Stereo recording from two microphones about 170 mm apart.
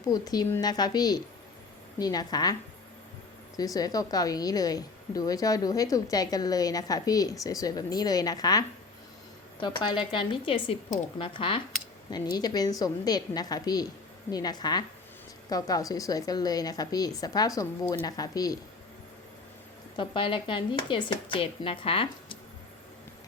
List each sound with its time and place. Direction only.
0.0 s a woman's voice: 20° left (ahead or behind)
3.6 s a woman's voice: 20° left (ahead or behind)
20.0 s speech: 30° left (ahead or behind)